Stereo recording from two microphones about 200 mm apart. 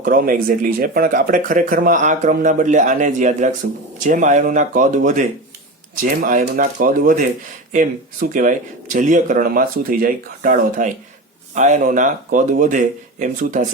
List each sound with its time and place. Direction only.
0.0 s speech: 45° right (ahead or behind)